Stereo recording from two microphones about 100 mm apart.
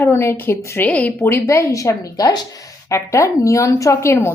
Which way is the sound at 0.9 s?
15° left (ahead or behind).